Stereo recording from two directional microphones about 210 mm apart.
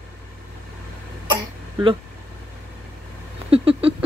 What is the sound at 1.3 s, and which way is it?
Throat clearing, 20° right (ahead or behind).